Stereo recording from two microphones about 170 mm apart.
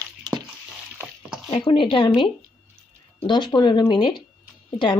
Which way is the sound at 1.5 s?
30° left (ahead or behind).